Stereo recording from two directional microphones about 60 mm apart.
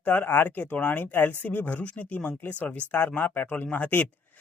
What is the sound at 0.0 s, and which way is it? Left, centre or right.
Speech, left.